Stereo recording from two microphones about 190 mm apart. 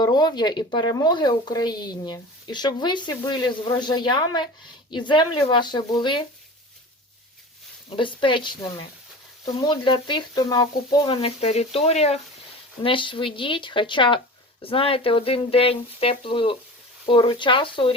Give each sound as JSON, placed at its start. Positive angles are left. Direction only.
{"t": 0.0, "sound": "speech", "side_deg": 20}
{"t": 7.9, "sound": "speech", "side_deg": 25}